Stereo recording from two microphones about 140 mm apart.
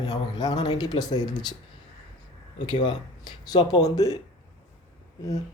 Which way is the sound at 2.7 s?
35° left (ahead or behind).